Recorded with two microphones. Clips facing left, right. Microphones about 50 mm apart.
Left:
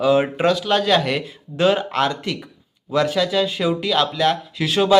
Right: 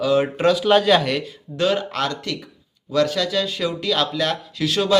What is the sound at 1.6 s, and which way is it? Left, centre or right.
Speech, centre.